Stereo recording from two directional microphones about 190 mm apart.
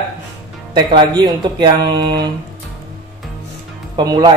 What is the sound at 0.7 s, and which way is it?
Speech, 25° right (ahead or behind).